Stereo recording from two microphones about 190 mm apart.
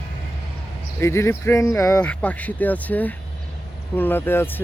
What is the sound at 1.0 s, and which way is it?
Speech, 15° left (ahead or behind).